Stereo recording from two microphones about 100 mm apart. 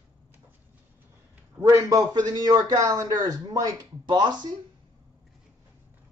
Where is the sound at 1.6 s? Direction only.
35° right (ahead or behind).